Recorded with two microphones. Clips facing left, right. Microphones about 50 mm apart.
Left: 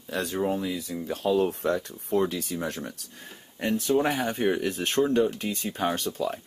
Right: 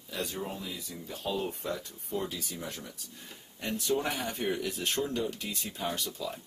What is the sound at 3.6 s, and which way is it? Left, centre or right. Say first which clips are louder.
Speech: left 7 dB; left.